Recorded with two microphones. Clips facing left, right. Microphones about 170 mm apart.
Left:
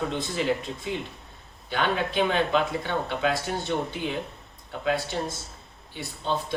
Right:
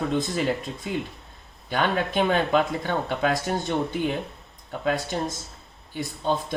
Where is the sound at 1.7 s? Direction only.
45° right (ahead or behind).